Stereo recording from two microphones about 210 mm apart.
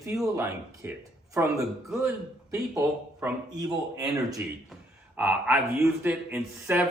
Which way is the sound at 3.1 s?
15° right (ahead or behind).